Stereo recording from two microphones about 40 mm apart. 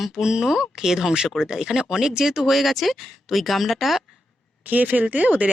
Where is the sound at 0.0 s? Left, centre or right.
Centre.